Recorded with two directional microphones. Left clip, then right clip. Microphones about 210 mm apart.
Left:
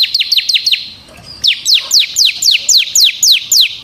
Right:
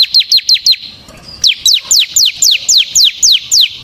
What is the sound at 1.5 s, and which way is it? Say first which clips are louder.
Bird: right 1 dB; 20° right (ahead or behind).